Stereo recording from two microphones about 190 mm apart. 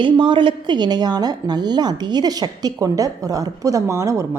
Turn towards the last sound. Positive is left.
turn(degrees=-15)  # may be behind; listen again after turning